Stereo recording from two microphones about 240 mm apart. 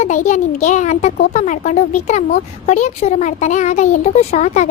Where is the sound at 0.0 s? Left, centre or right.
Left.